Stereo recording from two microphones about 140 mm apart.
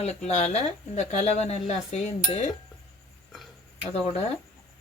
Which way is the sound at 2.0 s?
55° left (ahead or behind).